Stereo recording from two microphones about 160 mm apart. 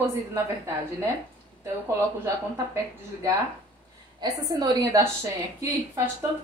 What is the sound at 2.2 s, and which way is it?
A woman's voice, 20° right (ahead or behind).